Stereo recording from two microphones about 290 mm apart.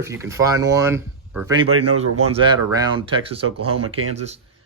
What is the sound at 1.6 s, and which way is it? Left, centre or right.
Speech, right.